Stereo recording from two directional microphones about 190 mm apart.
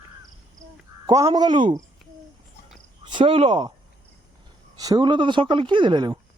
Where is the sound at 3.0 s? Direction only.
25° right (ahead or behind).